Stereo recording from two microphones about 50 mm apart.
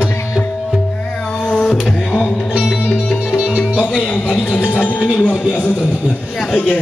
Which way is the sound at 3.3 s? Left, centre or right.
Centre.